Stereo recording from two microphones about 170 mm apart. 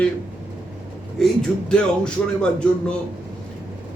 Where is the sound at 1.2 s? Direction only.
5° left (ahead or behind).